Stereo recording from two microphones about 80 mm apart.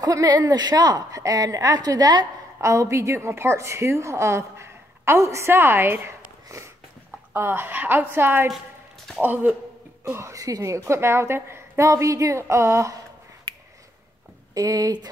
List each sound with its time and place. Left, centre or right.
0.0 s speech: right
2.6 s a woman's voice: right
10.0 s a woman's voice: right
14.5 s speech: right